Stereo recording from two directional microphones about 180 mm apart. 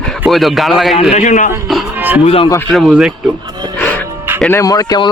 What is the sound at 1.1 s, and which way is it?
Speech, 45° left (ahead or behind).